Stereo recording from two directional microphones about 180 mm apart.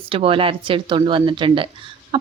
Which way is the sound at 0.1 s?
30° right (ahead or behind).